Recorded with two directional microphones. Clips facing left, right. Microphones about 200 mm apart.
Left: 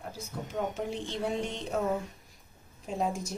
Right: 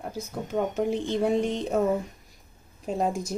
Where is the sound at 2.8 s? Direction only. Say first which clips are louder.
Right 5 dB; 45° right (ahead or behind).